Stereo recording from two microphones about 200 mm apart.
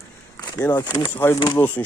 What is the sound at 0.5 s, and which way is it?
Speech, 15° left (ahead or behind).